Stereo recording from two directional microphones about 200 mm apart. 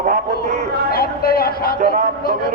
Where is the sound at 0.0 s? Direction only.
40° right (ahead or behind).